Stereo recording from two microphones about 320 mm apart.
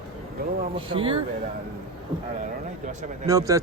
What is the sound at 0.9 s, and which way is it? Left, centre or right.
Speech, centre.